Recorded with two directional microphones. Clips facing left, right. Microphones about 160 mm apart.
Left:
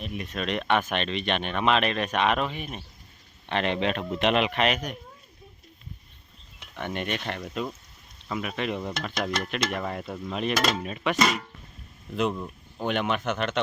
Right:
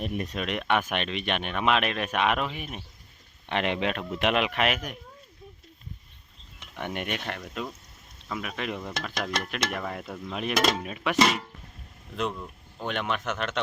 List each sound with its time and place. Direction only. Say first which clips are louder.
0.0 s speech: right 4 dB; 45° right (ahead or behind)
0.3 s speech: left 3 dB; 10° right (ahead or behind)
6.7 s speech: left 1 dB; 10° right (ahead or behind)
7.3 s speech: left 3 dB; centre (ahead or behind)
12.1 s speech: left 4 dB; 5° left (ahead or behind)